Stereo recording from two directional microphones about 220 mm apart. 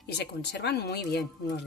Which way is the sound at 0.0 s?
50° left (ahead or behind).